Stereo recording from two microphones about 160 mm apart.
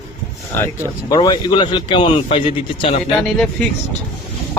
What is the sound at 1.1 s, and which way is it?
A man's voice, 30° left (ahead or behind).